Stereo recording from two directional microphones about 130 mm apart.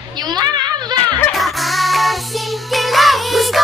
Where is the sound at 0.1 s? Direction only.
30° right (ahead or behind).